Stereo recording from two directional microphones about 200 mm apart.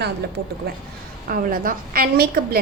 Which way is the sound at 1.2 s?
45° right (ahead or behind).